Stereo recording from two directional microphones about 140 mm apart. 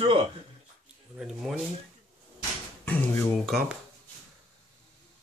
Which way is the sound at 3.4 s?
5° right (ahead or behind).